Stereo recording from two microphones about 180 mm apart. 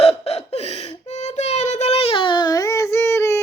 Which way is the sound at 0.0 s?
35° left (ahead or behind).